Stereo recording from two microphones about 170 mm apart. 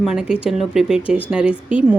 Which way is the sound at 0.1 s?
5° right (ahead or behind).